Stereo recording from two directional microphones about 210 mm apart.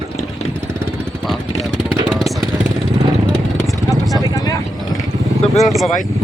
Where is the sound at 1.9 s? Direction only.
5° right (ahead or behind).